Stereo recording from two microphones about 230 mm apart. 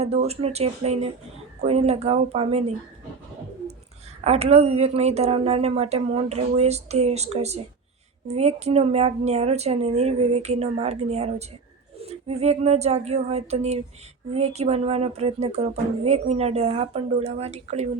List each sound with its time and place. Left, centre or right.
0.0 s speech: right
4.2 s speech: right